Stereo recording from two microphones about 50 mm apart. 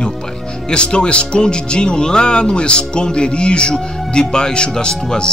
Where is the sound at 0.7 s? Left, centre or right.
Centre.